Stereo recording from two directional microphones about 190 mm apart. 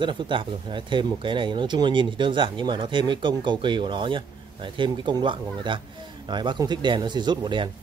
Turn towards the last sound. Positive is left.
turn(degrees=-25)  # may be behind; listen again after turning